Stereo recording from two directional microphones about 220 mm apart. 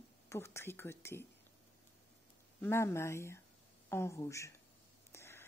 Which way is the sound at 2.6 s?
10° left (ahead or behind).